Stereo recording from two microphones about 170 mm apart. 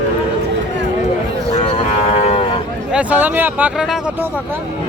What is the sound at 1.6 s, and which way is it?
Cattle, 40° left (ahead or behind).